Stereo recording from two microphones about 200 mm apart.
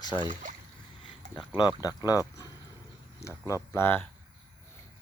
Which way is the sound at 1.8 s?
20° left (ahead or behind).